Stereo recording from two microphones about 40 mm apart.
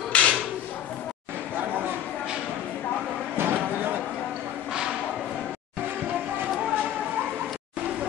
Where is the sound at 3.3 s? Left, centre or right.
Right.